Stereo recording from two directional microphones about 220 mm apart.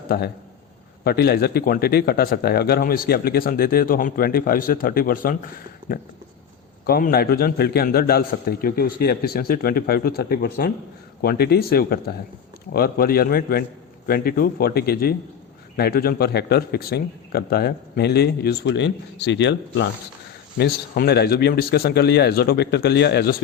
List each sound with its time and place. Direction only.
1.0 s speech: 45° left (ahead or behind)